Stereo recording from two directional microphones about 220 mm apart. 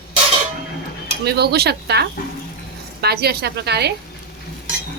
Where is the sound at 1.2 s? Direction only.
45° right (ahead or behind).